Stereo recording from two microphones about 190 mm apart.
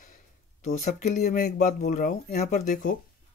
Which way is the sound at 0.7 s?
35° left (ahead or behind).